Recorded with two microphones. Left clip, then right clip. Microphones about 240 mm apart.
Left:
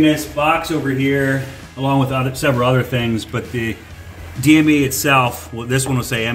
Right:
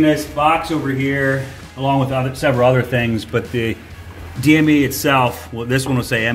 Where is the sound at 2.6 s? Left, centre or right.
Right.